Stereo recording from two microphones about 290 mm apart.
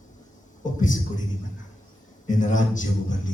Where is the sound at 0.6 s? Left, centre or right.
Left.